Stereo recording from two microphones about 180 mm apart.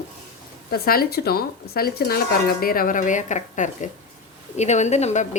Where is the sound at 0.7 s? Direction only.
55° left (ahead or behind).